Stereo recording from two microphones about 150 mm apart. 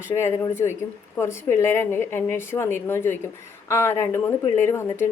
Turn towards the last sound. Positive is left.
turn(degrees=15)  # may be behind; listen again after turning